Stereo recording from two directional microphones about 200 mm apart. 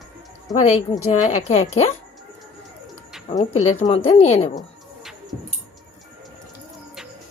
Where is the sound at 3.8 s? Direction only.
30° left (ahead or behind).